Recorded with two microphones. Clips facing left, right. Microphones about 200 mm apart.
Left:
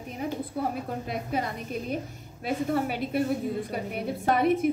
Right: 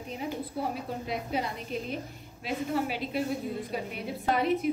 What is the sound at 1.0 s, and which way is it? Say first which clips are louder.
A woman's voice: even; 50° left (ahead or behind).